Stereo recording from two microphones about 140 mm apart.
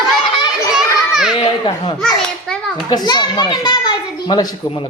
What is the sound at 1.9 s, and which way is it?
Children playing, 5° left (ahead or behind).